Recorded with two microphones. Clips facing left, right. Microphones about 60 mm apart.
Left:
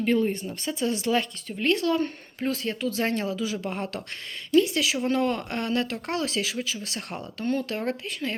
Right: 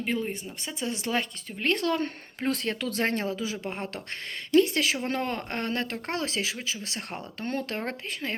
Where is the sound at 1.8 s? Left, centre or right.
Right.